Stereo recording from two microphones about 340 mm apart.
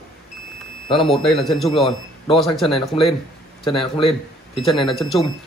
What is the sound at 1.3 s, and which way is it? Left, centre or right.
Speech, centre.